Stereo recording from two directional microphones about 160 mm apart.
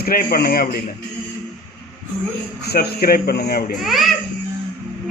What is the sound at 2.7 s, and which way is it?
Speech, 75° left (ahead or behind).